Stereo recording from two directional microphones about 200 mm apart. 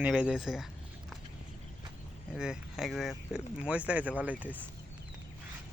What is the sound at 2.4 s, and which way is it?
Speech, centre (ahead or behind).